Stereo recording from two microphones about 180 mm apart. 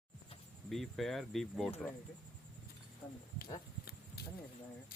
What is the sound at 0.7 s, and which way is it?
Speech, centre (ahead or behind).